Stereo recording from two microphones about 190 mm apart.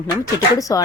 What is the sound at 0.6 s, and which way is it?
Speech, 15° left (ahead or behind).